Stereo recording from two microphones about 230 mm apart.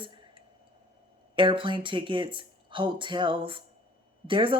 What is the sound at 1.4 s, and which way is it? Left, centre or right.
Speech, right.